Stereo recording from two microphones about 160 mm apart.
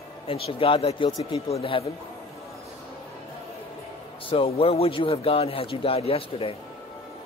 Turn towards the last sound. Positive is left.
turn(degrees=35)  # may be behind; listen again after turning